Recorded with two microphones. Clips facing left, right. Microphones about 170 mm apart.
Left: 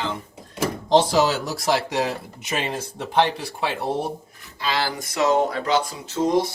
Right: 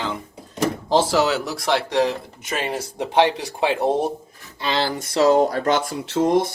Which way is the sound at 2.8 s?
15° right (ahead or behind).